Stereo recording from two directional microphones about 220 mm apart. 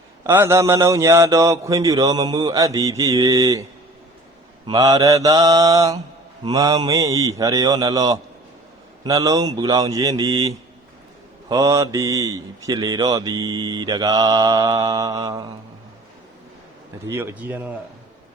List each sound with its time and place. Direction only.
0.3 s speech: 10° right (ahead or behind)
17.1 s speech: 10° right (ahead or behind)